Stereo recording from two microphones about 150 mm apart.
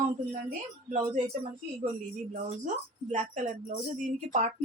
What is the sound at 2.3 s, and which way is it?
Speech, 60° right (ahead or behind).